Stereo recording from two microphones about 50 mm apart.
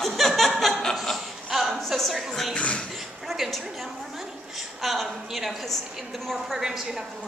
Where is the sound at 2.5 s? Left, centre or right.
Left.